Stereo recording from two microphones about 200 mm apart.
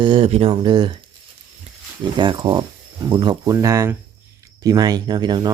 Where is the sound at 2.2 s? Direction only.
20° right (ahead or behind).